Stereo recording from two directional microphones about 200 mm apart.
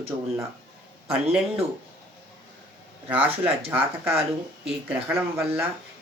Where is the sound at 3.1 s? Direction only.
10° right (ahead or behind).